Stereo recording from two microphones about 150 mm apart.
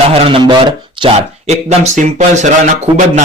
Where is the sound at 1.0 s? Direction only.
45° right (ahead or behind).